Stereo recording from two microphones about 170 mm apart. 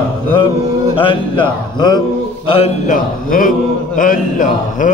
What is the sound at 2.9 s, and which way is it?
A man's voice, 50° left (ahead or behind).